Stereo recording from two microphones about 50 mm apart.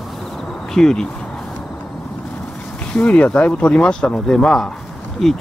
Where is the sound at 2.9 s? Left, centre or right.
Left.